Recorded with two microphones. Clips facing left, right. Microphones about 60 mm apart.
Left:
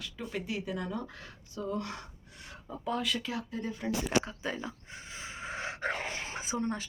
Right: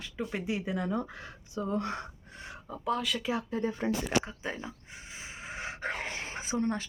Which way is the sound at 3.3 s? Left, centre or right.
Right.